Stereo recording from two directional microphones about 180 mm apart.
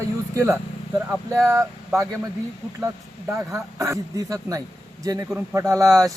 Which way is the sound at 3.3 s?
15° right (ahead or behind).